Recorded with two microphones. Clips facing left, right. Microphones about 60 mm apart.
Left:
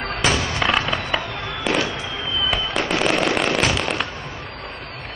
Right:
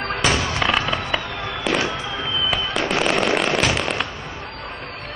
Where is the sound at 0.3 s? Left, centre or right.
Right.